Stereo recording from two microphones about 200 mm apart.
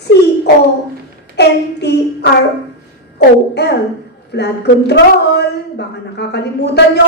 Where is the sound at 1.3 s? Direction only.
55° left (ahead or behind).